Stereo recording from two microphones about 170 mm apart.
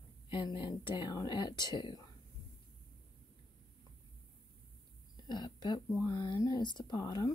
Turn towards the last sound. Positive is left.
turn(degrees=20)  # may be behind; listen again after turning